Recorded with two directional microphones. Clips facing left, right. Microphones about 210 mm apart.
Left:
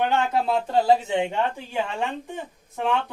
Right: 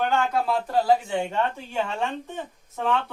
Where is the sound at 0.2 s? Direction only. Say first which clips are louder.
Left 1 dB; 25° left (ahead or behind).